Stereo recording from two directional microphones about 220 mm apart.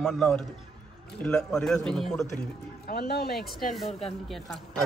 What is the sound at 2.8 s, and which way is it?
Speech, 45° left (ahead or behind).